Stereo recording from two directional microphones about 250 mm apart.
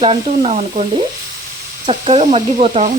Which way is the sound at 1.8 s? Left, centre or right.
Right.